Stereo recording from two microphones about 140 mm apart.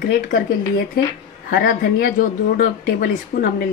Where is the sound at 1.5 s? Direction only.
90° left.